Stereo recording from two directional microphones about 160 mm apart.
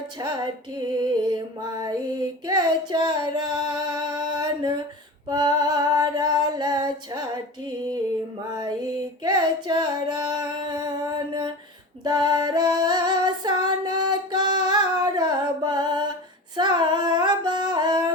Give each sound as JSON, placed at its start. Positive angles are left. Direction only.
{"t": 0.2, "sound": "music", "side_deg": -25}
{"t": 5.3, "sound": "female singing", "side_deg": -25}
{"t": 9.2, "sound": "female singing", "side_deg": -25}